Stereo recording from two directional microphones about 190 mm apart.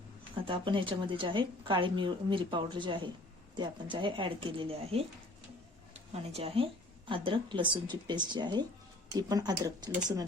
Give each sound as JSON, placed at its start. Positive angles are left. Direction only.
{"t": 0.4, "sound": "a woman's voice", "side_deg": -25}